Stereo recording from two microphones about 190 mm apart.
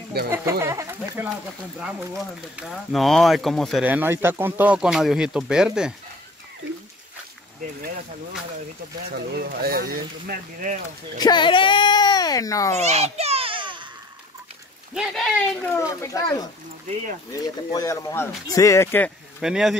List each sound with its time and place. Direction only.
0.3 s speech: 15° right (ahead or behind); by 3.8 s centre (ahead or behind)
3.8 s speech: 10° right (ahead or behind)
9.3 s speech: 50° right (ahead or behind)
11.1 s a child's voice: 20° left (ahead or behind)
12.7 s a sound: 35° right (ahead or behind)
15.0 s speech: centre (ahead or behind)
15.7 s speech: 15° left (ahead or behind)
19.4 s speech: centre (ahead or behind)